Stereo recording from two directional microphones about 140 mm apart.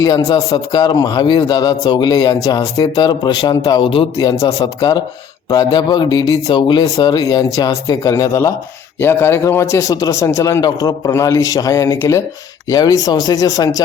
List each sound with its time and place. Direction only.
0.0 s a man's voice: 25° left (ahead or behind)